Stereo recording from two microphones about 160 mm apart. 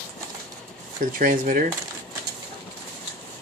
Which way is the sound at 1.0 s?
60° right (ahead or behind).